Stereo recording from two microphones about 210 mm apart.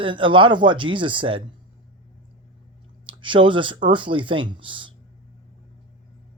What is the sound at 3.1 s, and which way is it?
Speech, 25° right (ahead or behind).